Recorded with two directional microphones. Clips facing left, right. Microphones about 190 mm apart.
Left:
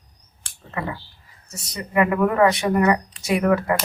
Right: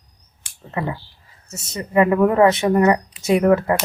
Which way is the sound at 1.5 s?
25° right (ahead or behind).